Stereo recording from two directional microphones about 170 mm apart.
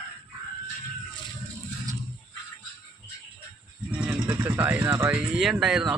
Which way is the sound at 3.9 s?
10° right (ahead or behind).